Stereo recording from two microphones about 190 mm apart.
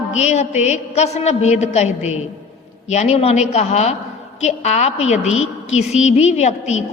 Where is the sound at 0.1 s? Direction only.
35° left (ahead or behind).